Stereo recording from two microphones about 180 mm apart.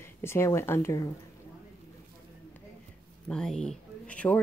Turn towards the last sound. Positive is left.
turn(degrees=5)  # may be behind; listen again after turning